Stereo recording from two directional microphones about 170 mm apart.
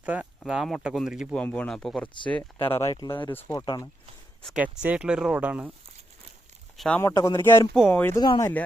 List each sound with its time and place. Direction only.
0.0 s speech: 10° right (ahead or behind); by 2.6 s 10° left (ahead or behind)
2.7 s speech: 20° left (ahead or behind)
3.2 s speech: 15° left (ahead or behind)
4.4 s speech: 5° right (ahead or behind)
6.7 s speech: 5° left (ahead or behind)
7.0 s speech: 20° left (ahead or behind)